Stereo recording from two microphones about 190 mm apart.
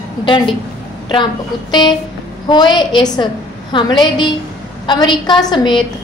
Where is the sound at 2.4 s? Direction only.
25° left (ahead or behind).